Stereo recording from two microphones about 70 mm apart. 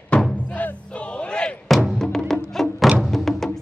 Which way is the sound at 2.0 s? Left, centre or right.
Centre.